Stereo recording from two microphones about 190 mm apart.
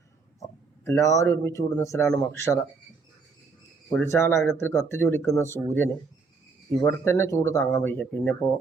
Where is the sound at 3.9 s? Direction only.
10° left (ahead or behind).